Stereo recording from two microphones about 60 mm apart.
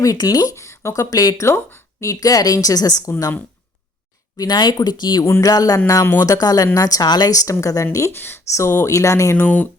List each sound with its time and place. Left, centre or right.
0.0 s a woman's voice: left
0.5 s a sound: left
0.9 s speech: left
1.5 s speech: left
2.0 s a woman's voice: left
4.4 s a woman's voice: left
6.7 s a woman's voice: left
8.1 s speech: left
8.4 s speech: left
9.3 s speech: left